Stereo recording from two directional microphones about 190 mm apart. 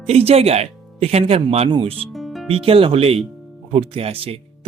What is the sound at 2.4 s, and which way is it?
Speech, 30° right (ahead or behind).